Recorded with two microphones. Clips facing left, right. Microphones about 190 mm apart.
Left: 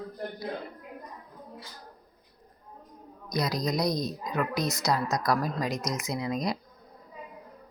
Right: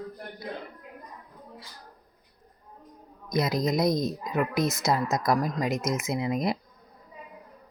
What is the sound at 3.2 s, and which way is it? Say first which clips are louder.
Speech: right 3 dB; 25° right (ahead or behind).